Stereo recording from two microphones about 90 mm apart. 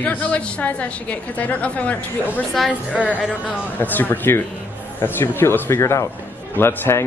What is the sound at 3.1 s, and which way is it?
Speech, 10° right (ahead or behind).